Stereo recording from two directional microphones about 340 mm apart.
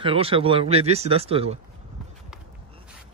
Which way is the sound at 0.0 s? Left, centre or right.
Centre.